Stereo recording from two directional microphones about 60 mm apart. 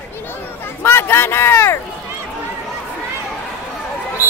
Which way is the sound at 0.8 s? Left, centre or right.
Left.